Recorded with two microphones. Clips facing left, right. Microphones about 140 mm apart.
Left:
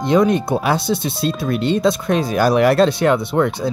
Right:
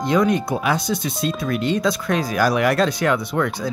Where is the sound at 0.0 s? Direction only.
25° left (ahead or behind).